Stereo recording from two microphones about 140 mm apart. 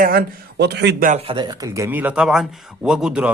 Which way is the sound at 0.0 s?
90° right.